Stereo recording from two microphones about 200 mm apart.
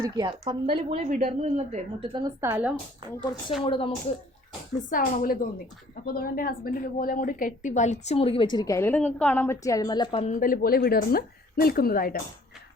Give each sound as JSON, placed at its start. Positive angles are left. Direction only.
{"t": 0.0, "sound": "a woman's voice", "side_deg": -20}
{"t": 2.4, "sound": "speech", "side_deg": -10}
{"t": 3.6, "sound": "a woman's voice", "side_deg": 25}
{"t": 4.8, "sound": "a woman's voice", "side_deg": 40}